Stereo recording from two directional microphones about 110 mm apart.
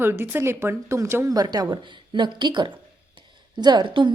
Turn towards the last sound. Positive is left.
turn(degrees=-45)  # may be behind; listen again after turning